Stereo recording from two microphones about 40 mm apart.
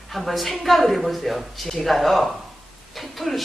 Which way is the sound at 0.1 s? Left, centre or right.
Centre.